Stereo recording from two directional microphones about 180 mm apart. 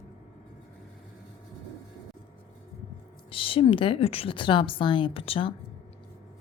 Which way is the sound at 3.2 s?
30° left (ahead or behind).